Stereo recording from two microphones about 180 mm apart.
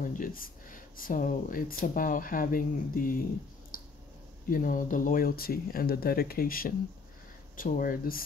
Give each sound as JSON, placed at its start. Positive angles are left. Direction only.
{"t": 0.0, "sound": "speech", "side_deg": 50}
{"t": 3.7, "sound": "a sound", "side_deg": 55}
{"t": 4.5, "sound": "speech", "side_deg": 50}